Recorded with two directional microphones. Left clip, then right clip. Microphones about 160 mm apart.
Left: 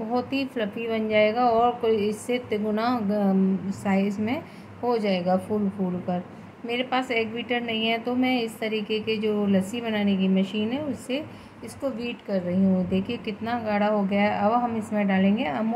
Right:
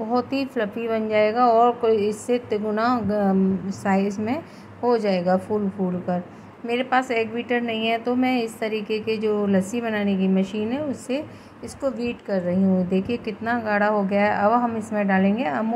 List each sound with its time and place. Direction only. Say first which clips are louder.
0.1 s a woman's voice: right 3 dB; 10° right (ahead or behind)